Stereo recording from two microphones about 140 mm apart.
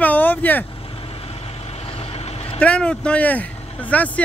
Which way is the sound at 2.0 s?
50° left (ahead or behind).